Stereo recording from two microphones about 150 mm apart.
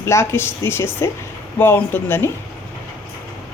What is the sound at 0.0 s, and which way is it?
A woman's voice, 20° left (ahead or behind).